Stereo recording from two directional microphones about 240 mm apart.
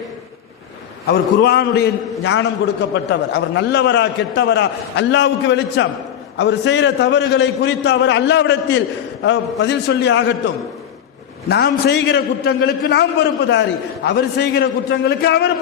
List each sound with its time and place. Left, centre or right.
1.0 s a man's voice: left